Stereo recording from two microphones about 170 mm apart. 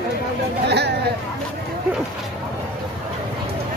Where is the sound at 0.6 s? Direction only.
80° right.